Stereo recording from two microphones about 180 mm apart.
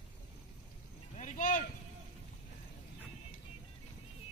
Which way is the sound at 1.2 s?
45° left (ahead or behind).